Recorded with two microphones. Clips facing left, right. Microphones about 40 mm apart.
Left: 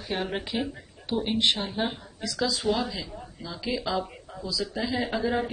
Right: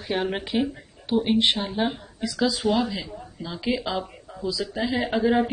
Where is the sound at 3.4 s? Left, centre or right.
Right.